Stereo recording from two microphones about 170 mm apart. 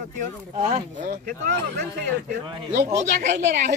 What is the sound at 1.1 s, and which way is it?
Speech, 55° right (ahead or behind).